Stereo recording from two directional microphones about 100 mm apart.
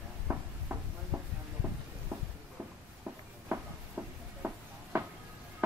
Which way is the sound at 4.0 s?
25° right (ahead or behind).